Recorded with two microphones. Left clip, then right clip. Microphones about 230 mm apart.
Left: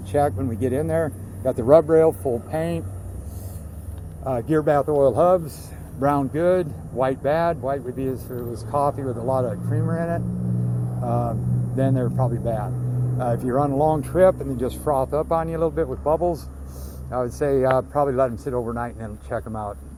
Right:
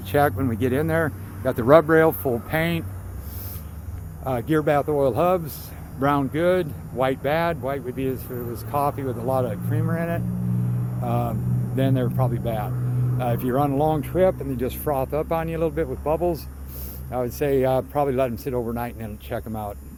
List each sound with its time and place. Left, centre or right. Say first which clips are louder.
0.1 s speech: right 1 dB; right
4.2 s speech: left 1 dB; centre
18.0 s speech: left 2 dB; right